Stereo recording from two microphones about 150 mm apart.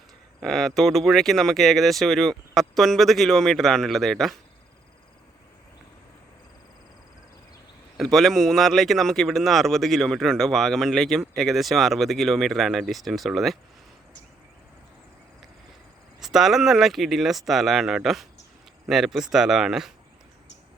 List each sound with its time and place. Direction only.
0.3 s speech: centre (ahead or behind)
7.9 s speech: centre (ahead or behind)
16.2 s speech: centre (ahead or behind)